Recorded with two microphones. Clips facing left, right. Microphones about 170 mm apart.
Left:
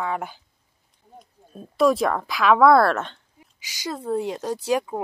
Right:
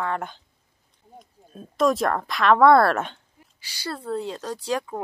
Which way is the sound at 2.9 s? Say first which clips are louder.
Right 1 dB; 10° right (ahead or behind).